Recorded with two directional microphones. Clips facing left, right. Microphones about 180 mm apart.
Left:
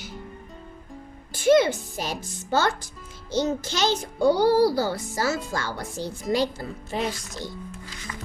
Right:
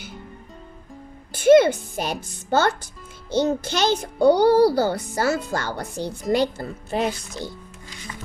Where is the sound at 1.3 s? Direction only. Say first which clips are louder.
Right 5 dB; 55° right (ahead or behind).